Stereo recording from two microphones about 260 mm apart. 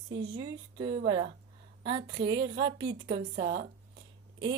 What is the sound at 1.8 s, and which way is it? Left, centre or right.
A woman's voice, centre.